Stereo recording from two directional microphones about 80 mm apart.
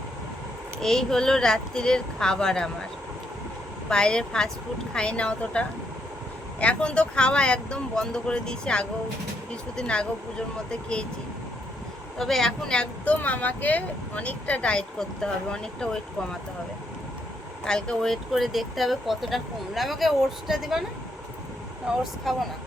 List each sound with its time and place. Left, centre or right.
0.8 s speech: centre
3.8 s speech: centre
12.1 s speech: centre
17.7 s speech: centre
21.9 s speech: centre